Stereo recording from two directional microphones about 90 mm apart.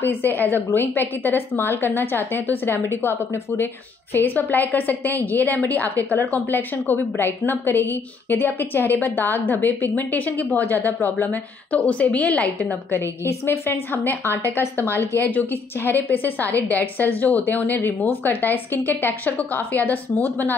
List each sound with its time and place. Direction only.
0.0 s a woman's voice: 20° left (ahead or behind)
13.2 s a woman's voice: 30° left (ahead or behind)